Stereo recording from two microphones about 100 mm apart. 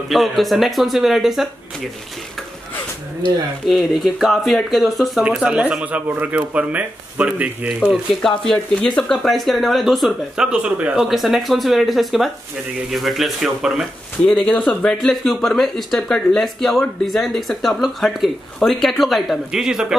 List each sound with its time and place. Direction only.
0.1 s speech: centre (ahead or behind)
3.6 s speech: centre (ahead or behind)
7.9 s speech: 5° left (ahead or behind); by 11.1 s 10° right (ahead or behind)
11.1 s speech: centre (ahead or behind)
14.2 s speech: 10° left (ahead or behind); by 20.0 s 5° right (ahead or behind)